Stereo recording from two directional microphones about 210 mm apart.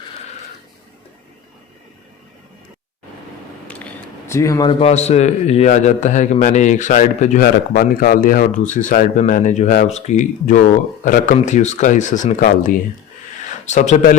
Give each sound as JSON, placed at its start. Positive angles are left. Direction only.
{"t": 3.7, "sound": "speech", "side_deg": 5}